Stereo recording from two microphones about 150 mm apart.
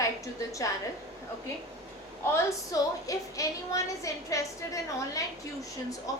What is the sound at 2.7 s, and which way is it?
A woman's voice, 20° left (ahead or behind).